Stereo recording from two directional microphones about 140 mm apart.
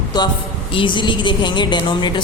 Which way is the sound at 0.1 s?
30° left (ahead or behind).